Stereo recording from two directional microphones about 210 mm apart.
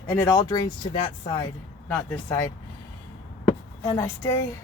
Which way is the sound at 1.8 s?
5° left (ahead or behind).